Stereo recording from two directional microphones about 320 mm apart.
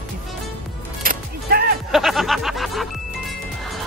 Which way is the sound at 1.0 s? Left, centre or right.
Right.